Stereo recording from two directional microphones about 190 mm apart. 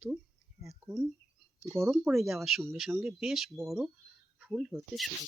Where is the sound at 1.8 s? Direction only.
Centre (ahead or behind).